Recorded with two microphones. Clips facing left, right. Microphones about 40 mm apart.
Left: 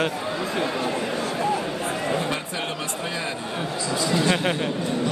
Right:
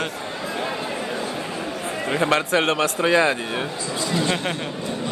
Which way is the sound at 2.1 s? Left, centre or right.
Right.